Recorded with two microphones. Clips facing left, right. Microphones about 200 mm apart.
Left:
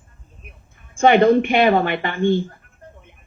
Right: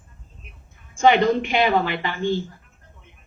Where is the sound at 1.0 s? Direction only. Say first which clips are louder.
Left 4 dB; 55° left (ahead or behind).